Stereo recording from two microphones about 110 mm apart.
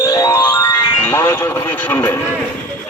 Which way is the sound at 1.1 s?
25° left (ahead or behind).